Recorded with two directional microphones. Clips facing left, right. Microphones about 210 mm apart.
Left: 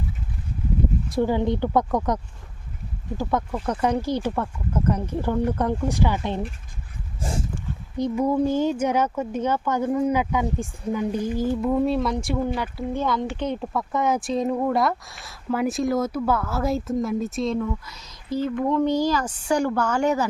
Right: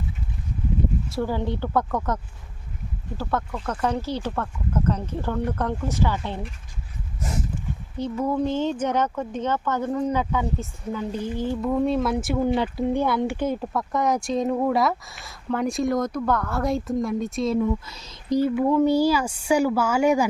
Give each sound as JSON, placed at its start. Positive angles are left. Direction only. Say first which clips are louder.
{"t": 1.1, "sound": "speech", "louder": "left 7 dB", "side_deg": 15}
{"t": 7.2, "sound": "dog", "louder": "left 1 dB", "side_deg": 30}
{"t": 7.9, "sound": "speech", "louder": "left 3 dB", "side_deg": 15}
{"t": 12.5, "sound": "speech", "louder": "right 4 dB", "side_deg": -20}
{"t": 17.6, "sound": "speech", "louder": "right 4 dB", "side_deg": -25}
{"t": 18.3, "sound": "a woman's voice", "louder": "right 3 dB", "side_deg": -10}